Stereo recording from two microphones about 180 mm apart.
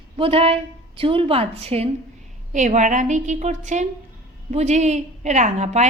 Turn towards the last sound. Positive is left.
turn(degrees=-40)  # may be behind; listen again after turning